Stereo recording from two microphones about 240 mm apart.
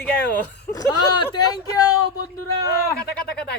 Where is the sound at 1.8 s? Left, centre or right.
Left.